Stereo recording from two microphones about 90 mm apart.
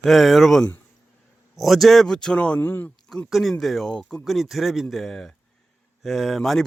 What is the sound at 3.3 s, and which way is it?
Speech, centre (ahead or behind).